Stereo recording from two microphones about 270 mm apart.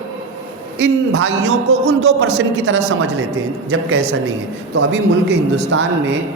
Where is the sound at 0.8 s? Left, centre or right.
Right.